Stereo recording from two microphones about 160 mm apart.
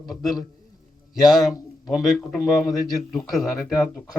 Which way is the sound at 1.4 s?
25° left (ahead or behind).